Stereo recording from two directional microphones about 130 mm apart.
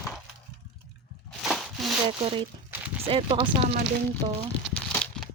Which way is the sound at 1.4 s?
Centre (ahead or behind).